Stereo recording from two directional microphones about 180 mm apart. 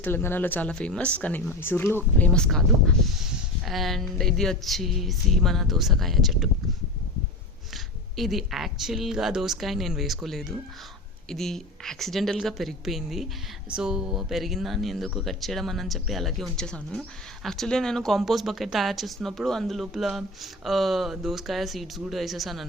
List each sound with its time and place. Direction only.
0.0 s speech: 10° left (ahead or behind)
8.1 s speech: centre (ahead or behind)